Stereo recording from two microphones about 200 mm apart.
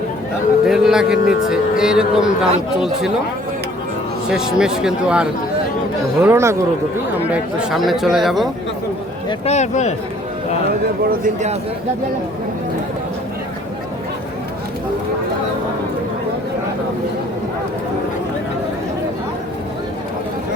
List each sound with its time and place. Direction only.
0.6 s speech: 5° right (ahead or behind)
4.3 s a man's voice: 5° right (ahead or behind)
9.5 s speech: 35° left (ahead or behind)
11.0 s speech: 45° right (ahead or behind)